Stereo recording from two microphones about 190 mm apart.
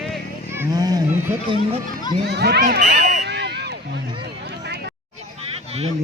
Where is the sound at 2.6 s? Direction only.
45° right (ahead or behind); by 3.7 s 60° right (ahead or behind).